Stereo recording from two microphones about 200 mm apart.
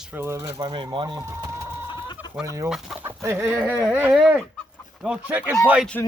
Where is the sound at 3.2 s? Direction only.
10° right (ahead or behind).